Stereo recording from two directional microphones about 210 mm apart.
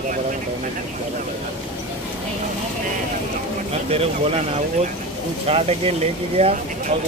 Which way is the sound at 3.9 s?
30° right (ahead or behind).